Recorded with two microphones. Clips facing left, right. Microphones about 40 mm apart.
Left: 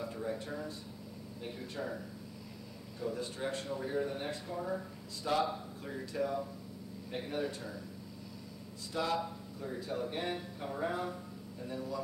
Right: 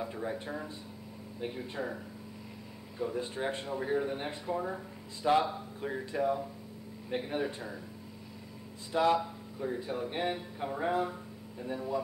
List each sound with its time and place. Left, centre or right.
0.0 s speech: right
3.0 s speech: right
8.9 s speech: right